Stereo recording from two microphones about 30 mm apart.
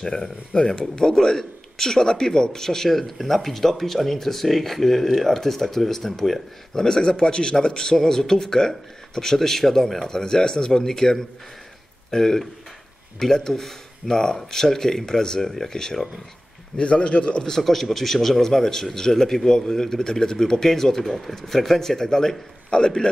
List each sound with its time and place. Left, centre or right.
0.0 s speech: left
6.8 s speech: left
16.7 s a man's voice: left
17.6 s speech: centre
22.7 s a man's voice: left